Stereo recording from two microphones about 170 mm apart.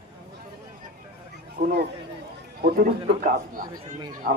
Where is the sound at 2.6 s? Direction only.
60° right (ahead or behind).